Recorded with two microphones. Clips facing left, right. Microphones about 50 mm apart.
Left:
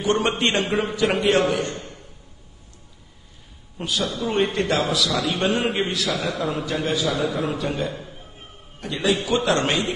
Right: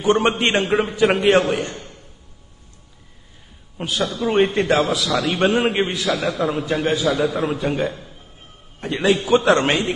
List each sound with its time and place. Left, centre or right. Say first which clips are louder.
0.0 s a man's voice: right 4 dB; right
3.7 s a man's voice: right 2 dB; right
6.0 s a man's voice: right 4 dB; centre; by 9.9 s right